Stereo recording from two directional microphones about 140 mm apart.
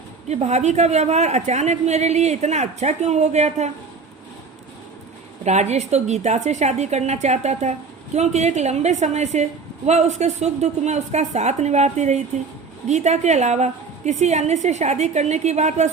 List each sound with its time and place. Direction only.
0.3 s a woman's voice: 50° right (ahead or behind)
5.5 s a woman's voice: 55° right (ahead or behind)